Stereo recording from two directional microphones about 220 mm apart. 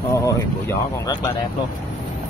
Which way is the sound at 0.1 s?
15° left (ahead or behind).